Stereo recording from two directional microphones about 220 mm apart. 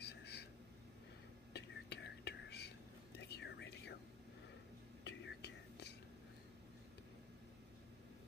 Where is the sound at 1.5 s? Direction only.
50° left (ahead or behind).